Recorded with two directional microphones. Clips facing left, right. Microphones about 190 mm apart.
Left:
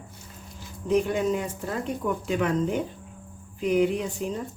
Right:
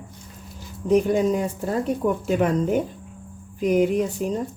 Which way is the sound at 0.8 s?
40° right (ahead or behind).